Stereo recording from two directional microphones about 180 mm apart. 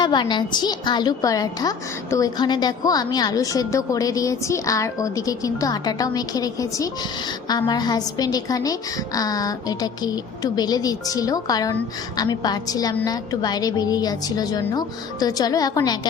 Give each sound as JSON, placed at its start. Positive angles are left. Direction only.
{"t": 0.0, "sound": "a woman's voice", "side_deg": 25}